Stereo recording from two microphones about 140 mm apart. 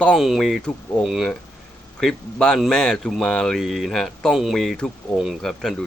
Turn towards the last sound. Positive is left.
turn(degrees=5)  # may be behind; listen again after turning